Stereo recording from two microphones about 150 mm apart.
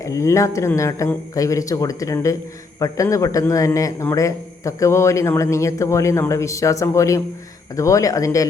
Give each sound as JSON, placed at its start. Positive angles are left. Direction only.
{"t": 0.0, "sound": "speech", "side_deg": 20}